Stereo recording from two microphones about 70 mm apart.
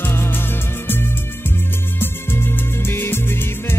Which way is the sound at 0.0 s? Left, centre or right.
Left.